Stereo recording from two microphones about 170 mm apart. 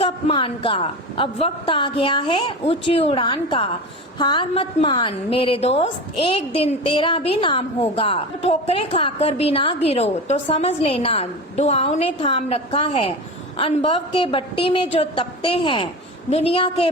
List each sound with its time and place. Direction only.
0.0 s a woman's voice: 35° left (ahead or behind)